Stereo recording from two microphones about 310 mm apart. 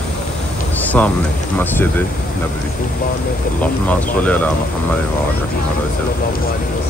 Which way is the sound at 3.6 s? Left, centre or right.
Centre.